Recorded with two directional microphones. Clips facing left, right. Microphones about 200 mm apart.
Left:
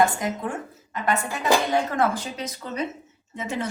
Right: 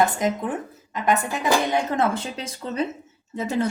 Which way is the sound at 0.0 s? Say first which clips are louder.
Right 1 dB; 20° right (ahead or behind).